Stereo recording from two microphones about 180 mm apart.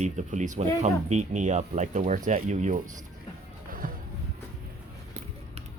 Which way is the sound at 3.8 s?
50° right (ahead or behind).